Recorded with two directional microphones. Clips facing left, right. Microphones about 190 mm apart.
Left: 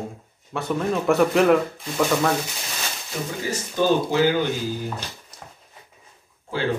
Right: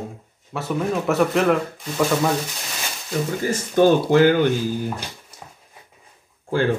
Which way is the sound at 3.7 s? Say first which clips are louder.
Right 5 dB; 55° right (ahead or behind).